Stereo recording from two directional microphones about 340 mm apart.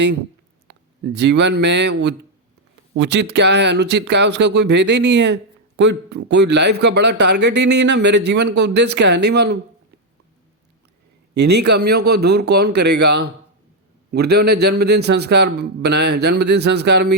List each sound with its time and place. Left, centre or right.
0.7 s a man's voice: right
11.3 s a man's voice: right